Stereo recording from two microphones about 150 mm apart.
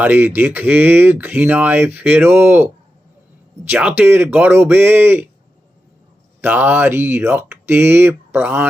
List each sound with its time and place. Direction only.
0.0 s speech: 15° right (ahead or behind)
6.4 s speech: 10° right (ahead or behind)